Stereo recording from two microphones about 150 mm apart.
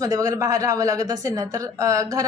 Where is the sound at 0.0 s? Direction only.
25° right (ahead or behind).